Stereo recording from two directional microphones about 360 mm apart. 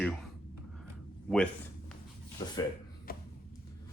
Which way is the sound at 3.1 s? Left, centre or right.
Left.